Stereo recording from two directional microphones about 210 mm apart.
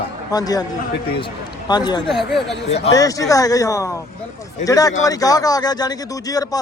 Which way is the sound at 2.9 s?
15° left (ahead or behind).